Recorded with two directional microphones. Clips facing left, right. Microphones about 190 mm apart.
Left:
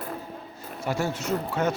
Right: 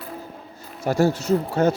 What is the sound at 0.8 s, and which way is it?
Speech, 40° right (ahead or behind).